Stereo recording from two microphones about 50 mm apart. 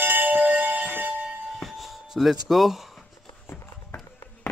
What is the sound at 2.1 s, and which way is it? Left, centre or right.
Speech, centre.